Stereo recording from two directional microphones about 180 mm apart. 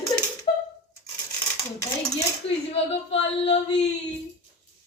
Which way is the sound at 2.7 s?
35° left (ahead or behind).